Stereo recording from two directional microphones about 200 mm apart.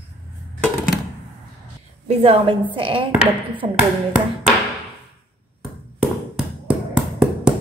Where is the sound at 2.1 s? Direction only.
25° right (ahead or behind).